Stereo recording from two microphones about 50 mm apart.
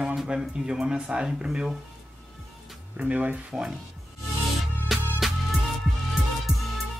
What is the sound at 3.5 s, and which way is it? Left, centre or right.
Speech, centre.